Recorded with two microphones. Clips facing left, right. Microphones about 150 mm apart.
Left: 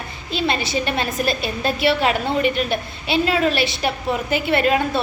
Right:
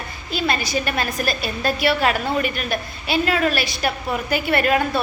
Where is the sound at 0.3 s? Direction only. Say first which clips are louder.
Left 1 dB; 25° left (ahead or behind).